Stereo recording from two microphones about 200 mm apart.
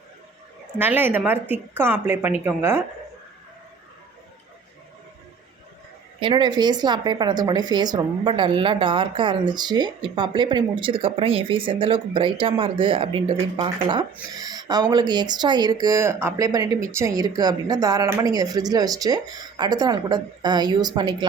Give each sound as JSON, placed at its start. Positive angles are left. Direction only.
{"t": 0.8, "sound": "a woman's voice", "side_deg": -10}
{"t": 6.1, "sound": "speech", "side_deg": -25}